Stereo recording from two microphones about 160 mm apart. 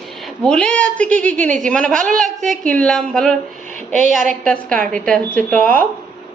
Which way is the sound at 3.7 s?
55° right (ahead or behind).